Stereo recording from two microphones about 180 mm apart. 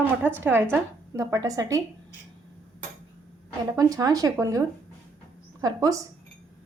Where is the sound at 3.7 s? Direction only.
20° right (ahead or behind).